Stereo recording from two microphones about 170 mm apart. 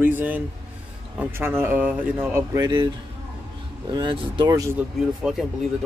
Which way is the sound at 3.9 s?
30° right (ahead or behind).